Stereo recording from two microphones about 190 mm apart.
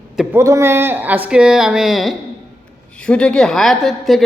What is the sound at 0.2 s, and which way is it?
A man's voice, 10° right (ahead or behind).